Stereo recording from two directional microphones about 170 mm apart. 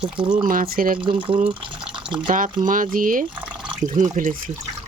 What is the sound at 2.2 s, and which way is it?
Speech, 50° right (ahead or behind).